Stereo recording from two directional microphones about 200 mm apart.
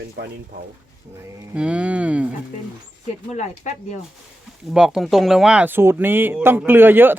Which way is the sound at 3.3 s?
35° left (ahead or behind).